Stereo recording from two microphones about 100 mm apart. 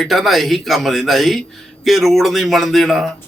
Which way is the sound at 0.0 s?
Centre (ahead or behind).